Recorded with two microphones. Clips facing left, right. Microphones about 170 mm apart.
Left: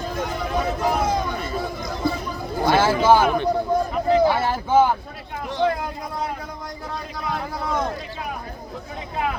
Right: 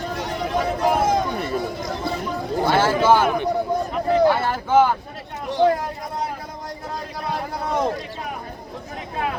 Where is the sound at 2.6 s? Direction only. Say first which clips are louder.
Left 1 dB; 10° left (ahead or behind).